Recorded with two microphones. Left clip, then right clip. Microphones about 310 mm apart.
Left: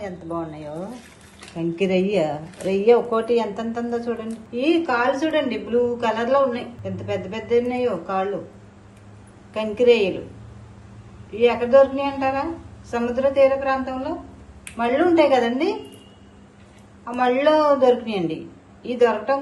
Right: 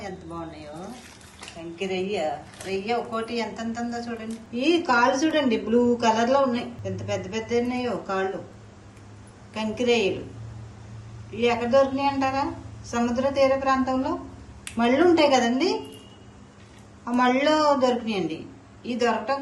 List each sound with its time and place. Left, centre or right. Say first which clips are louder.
0.0 s speech: left 6 dB; centre
1.5 s a woman's voice: left 8 dB; centre
2.8 s speech: left 12 dB; left
3.3 s a man's voice: left 7 dB; centre
9.5 s a man's voice: left 7 dB; centre
11.3 s a man's voice: left 5 dB; centre
17.2 s a man's voice: left 3 dB; centre